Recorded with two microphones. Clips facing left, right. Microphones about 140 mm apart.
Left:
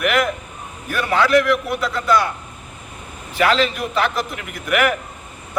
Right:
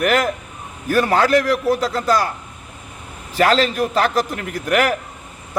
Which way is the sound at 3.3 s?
40° right (ahead or behind).